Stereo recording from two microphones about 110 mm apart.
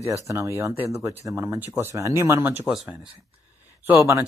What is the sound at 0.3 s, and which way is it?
Speech, 25° right (ahead or behind).